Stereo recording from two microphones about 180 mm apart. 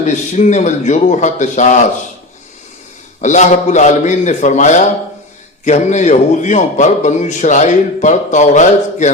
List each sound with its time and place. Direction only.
0.0 s speech: 40° left (ahead or behind)
3.2 s a man's voice: 40° left (ahead or behind)